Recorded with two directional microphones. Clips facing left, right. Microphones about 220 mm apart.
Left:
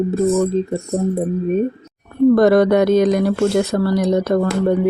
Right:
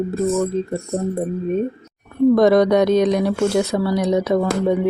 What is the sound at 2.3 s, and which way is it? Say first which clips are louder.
Speech: left 1 dB; 5° left (ahead or behind).